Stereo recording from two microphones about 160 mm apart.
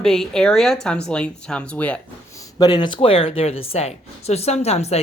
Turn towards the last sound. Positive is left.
turn(degrees=40)  # may be behind; listen again after turning